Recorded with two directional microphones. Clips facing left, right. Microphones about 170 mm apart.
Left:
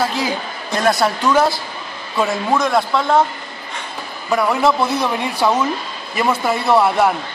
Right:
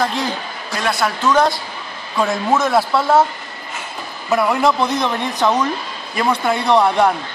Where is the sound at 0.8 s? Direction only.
40° left (ahead or behind).